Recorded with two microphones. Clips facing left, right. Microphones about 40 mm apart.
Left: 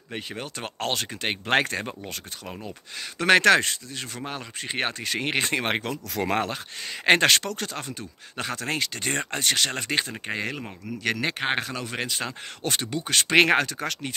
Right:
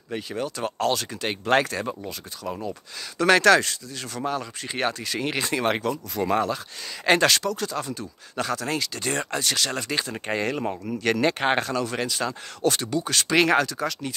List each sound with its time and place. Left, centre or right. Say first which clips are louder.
0.1 s speech: right 5 dB; left
3.2 s speech: right 1 dB; left
6.1 s speech: right 1 dB; left
7.1 s speech: even; left
10.2 s speech: right 5 dB; centre; by 13.8 s left